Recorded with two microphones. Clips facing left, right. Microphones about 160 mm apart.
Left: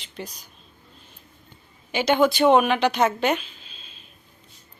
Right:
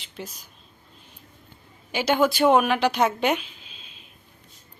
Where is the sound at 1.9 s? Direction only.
10° right (ahead or behind).